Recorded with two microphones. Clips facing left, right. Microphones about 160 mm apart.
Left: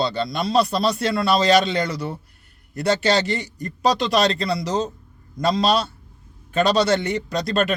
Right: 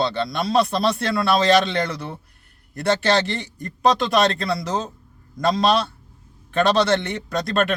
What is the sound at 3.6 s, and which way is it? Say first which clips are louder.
Speech: right 2 dB; centre (ahead or behind).